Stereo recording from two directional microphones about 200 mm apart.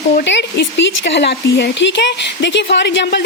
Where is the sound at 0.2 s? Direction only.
60° left (ahead or behind).